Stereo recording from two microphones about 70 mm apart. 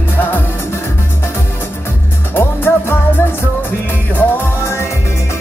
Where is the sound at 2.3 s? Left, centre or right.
Left.